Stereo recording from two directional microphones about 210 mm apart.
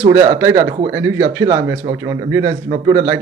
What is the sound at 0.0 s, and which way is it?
Speech, 15° right (ahead or behind).